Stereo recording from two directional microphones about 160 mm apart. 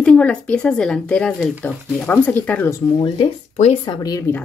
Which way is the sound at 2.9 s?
30° left (ahead or behind).